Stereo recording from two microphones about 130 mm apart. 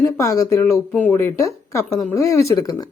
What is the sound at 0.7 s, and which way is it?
Speech, 10° left (ahead or behind).